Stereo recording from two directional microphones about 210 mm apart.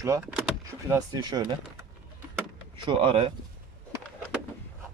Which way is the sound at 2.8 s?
25° right (ahead or behind).